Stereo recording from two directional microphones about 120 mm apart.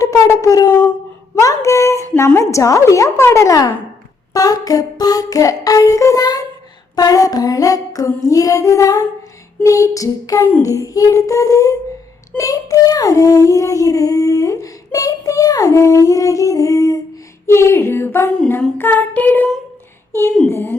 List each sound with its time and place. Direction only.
0.0 s speech: 30° left (ahead or behind)
1.4 s child singing: 25° left (ahead or behind)
4.4 s a sound: 30° left (ahead or behind)
6.9 s child singing: 30° left (ahead or behind); by 19.5 s 15° left (ahead or behind)
20.5 s child singing: 20° left (ahead or behind)